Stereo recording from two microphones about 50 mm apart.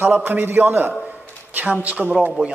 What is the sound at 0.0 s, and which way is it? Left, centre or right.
A man's voice, right.